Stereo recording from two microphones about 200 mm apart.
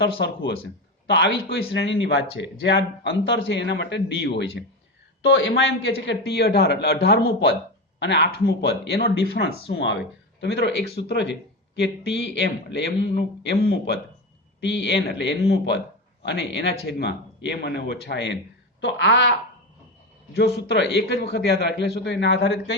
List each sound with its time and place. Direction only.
0.0 s speech: 55° left (ahead or behind)
20.7 s speech: 55° left (ahead or behind)